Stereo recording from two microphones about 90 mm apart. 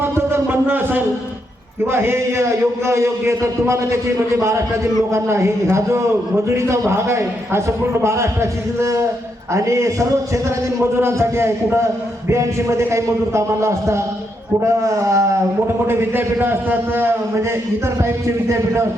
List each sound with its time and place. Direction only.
0.0 s music: 25° right (ahead or behind)
1.9 s a man's voice: 25° right (ahead or behind)